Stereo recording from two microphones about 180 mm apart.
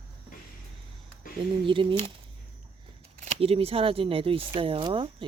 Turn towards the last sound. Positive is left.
turn(degrees=-30)  # may be behind; listen again after turning